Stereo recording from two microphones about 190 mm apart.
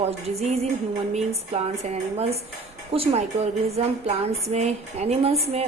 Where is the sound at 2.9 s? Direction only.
30° right (ahead or behind).